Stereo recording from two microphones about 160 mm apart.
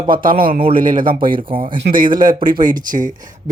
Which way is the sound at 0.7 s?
60° right (ahead or behind).